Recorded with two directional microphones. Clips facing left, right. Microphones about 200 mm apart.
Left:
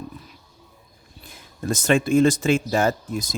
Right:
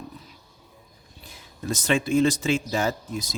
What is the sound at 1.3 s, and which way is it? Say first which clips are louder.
Speech: left 4 dB; 50° left (ahead or behind).